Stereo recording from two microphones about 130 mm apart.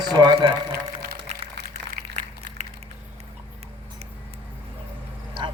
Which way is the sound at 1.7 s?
65° right (ahead or behind).